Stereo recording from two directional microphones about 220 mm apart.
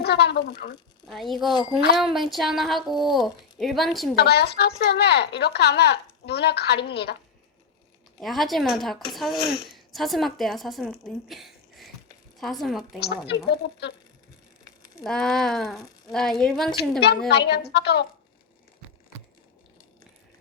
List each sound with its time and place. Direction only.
0.0 s speech: 50° left (ahead or behind)
1.0 s speech: centre (ahead or behind)
4.1 s speech: 45° left (ahead or behind)
8.2 s speech: centre (ahead or behind)
9.4 s speech: 45° left (ahead or behind)
9.6 s a woman's voice: centre (ahead or behind)
13.2 s speech: 50° left (ahead or behind)
15.0 s speech: 5° left (ahead or behind)
17.2 s speech: 50° left (ahead or behind)